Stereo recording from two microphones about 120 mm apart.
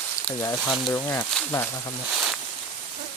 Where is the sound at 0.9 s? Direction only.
20° left (ahead or behind).